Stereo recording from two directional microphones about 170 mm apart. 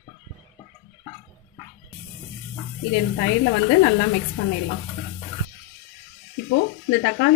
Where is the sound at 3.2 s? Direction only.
90° left.